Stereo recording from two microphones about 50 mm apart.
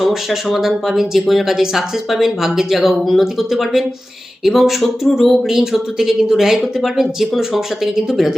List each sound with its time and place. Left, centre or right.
0.0 s speech: centre